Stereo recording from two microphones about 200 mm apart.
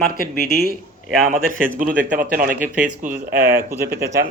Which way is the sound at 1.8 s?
40° right (ahead or behind).